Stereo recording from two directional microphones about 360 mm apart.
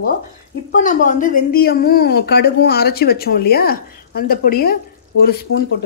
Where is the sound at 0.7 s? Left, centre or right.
Left.